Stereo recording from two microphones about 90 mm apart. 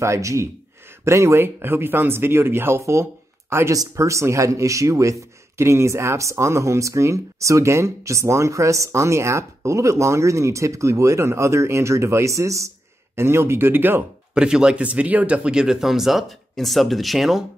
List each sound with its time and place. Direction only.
0.0 s speech: 35° right (ahead or behind)
14.3 s speech: 10° right (ahead or behind)